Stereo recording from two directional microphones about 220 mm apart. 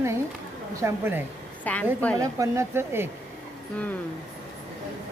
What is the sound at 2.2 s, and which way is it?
Speech, 15° right (ahead or behind).